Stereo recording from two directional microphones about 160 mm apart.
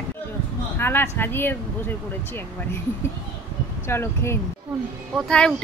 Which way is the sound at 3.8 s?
15° left (ahead or behind).